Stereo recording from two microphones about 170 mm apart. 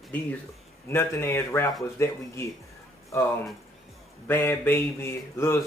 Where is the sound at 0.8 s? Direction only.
15° left (ahead or behind).